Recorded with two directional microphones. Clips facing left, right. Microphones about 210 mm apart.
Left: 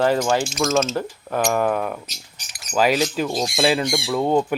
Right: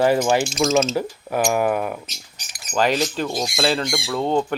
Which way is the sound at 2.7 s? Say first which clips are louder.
Left 1 dB; 5° left (ahead or behind).